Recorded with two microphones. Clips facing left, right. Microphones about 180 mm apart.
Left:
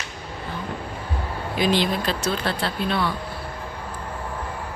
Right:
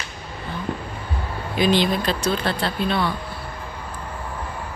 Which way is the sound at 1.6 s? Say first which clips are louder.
Right 2 dB; 5° left (ahead or behind).